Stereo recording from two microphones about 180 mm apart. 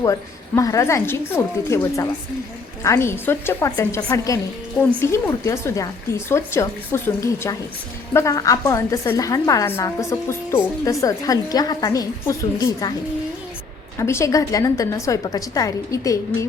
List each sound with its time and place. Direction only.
0.0 s a woman's voice: 20° left (ahead or behind)
14.0 s a woman's voice: 15° left (ahead or behind)